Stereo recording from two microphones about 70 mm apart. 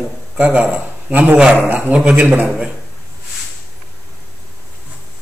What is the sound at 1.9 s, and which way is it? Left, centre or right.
Speech, centre.